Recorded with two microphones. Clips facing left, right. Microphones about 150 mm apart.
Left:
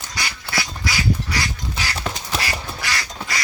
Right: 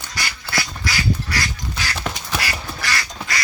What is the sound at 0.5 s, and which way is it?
Duck, 15° left (ahead or behind).